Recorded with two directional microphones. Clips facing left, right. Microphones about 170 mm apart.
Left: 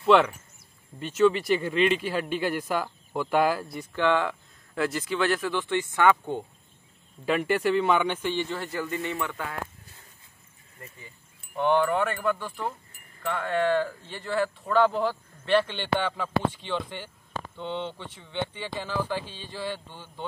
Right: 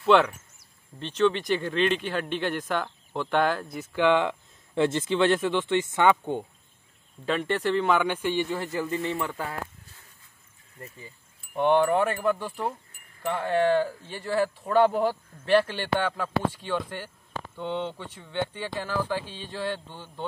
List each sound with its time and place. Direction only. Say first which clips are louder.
0.0 s speech: even; centre (ahead or behind)
3.9 s speech: right 2 dB; 15° right (ahead or behind)
7.2 s speech: left 2 dB; 5° left (ahead or behind); by 8.5 s 10° right (ahead or behind)
8.7 s speech: right 1 dB; 30° right (ahead or behind)
11.5 s speech: right 2 dB; 15° right (ahead or behind)